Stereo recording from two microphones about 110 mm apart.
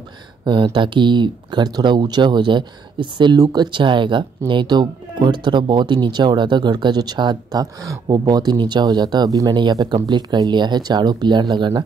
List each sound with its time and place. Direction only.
0.5 s speech: 50° right (ahead or behind)